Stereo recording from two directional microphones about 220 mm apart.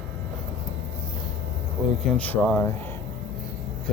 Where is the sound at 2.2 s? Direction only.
5° left (ahead or behind).